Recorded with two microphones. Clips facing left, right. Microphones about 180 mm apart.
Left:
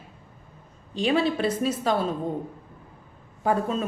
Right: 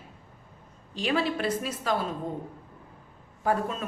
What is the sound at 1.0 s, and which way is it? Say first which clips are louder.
A woman's voice: left 4 dB; 25° left (ahead or behind).